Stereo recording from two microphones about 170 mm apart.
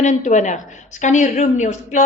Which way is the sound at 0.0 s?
45° left (ahead or behind).